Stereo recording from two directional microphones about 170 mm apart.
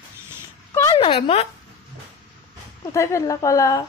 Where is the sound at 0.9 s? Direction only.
30° left (ahead or behind).